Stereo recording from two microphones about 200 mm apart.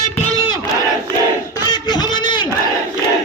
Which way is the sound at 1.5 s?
20° left (ahead or behind).